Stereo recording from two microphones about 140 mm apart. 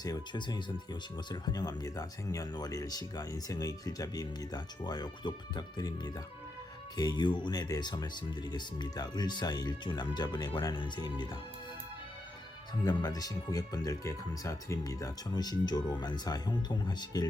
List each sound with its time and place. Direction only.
0.0 s speech: 30° left (ahead or behind)
6.9 s speech: 30° left (ahead or behind)
12.8 s speech: 30° left (ahead or behind)